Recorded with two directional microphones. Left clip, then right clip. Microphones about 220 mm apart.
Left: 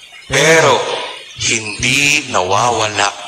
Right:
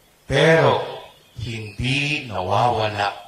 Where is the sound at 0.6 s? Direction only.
45° left (ahead or behind).